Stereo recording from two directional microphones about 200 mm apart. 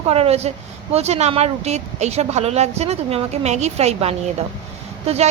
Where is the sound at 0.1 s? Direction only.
30° right (ahead or behind).